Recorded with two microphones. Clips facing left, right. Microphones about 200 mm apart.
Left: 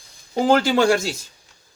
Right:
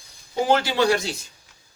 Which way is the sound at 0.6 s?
50° left (ahead or behind).